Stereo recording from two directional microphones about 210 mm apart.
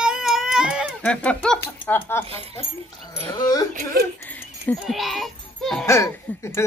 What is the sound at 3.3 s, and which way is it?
Speech, 15° left (ahead or behind).